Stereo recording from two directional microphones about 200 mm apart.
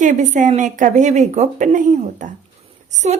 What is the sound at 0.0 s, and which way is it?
A woman's voice, 40° right (ahead or behind).